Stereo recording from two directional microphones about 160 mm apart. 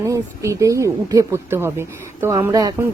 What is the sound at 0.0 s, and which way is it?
Speech, 20° right (ahead or behind).